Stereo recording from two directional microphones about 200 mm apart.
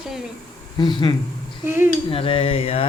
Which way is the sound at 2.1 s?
30° left (ahead or behind).